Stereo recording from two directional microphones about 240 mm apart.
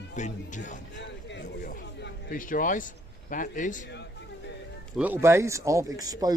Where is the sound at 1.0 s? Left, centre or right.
Left.